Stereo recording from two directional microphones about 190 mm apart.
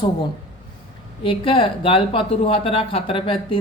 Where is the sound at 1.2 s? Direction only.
25° left (ahead or behind).